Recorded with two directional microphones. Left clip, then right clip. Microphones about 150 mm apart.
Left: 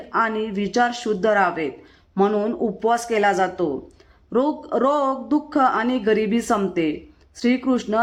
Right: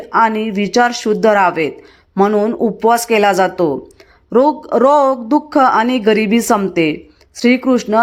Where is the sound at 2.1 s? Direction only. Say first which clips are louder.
Right 7 dB; 20° right (ahead or behind).